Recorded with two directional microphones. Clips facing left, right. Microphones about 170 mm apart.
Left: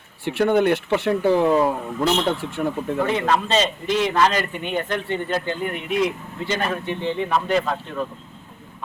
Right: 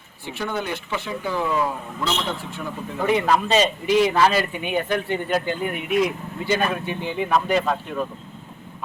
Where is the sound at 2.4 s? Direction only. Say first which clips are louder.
Left 6 dB; 75° left (ahead or behind).